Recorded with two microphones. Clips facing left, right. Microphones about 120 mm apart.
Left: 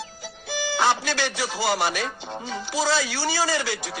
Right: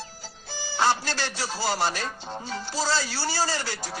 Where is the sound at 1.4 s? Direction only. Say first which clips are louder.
Left 1 dB; 15° left (ahead or behind).